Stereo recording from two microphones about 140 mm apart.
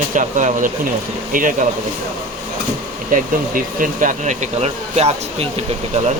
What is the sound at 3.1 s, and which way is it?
Speech, 70° right (ahead or behind).